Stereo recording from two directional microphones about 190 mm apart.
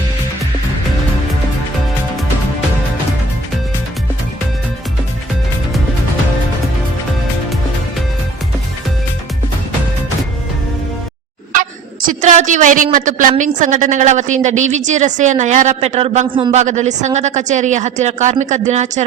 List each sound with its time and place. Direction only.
12.0 s a woman's voice: 40° right (ahead or behind)